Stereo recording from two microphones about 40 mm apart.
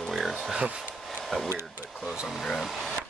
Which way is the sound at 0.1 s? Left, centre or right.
Centre.